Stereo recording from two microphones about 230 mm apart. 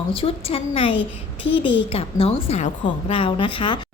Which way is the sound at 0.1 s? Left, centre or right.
Left.